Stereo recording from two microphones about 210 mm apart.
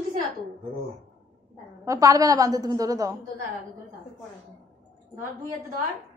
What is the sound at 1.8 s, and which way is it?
A woman's voice, 15° right (ahead or behind).